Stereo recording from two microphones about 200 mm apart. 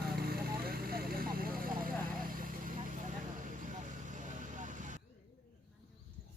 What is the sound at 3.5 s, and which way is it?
Vehicle, 40° right (ahead or behind).